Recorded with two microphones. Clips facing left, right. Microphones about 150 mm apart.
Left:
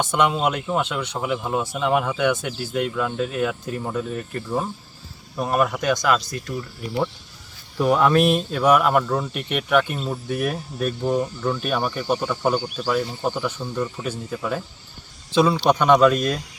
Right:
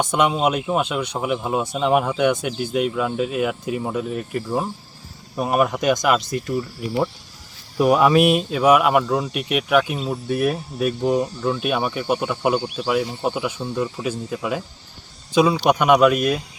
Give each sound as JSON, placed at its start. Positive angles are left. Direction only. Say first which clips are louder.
{"t": 0.0, "sound": "speech", "louder": "right 2 dB", "side_deg": -10}
{"t": 11.3, "sound": "speech", "louder": "right 2 dB", "side_deg": -30}
{"t": 11.6, "sound": "speech", "louder": "right 2 dB", "side_deg": -5}